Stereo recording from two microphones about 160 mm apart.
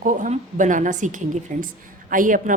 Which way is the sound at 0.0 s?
55° right (ahead or behind).